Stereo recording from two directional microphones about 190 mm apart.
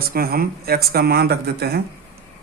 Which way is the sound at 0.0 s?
50° right (ahead or behind).